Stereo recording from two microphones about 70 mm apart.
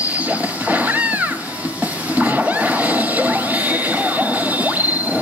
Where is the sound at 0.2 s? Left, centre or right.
Right.